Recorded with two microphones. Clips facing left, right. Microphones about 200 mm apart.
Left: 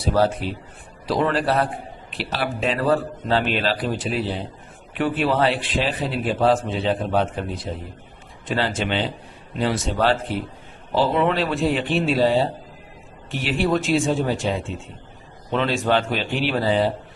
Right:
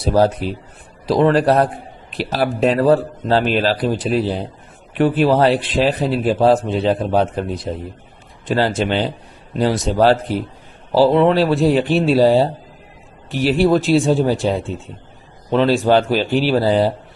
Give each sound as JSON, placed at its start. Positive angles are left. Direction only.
{"t": 0.0, "sound": "a man's voice", "side_deg": -40}